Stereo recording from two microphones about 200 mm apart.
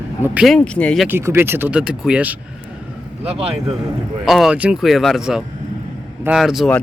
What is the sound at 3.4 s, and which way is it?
Speech, 30° right (ahead or behind).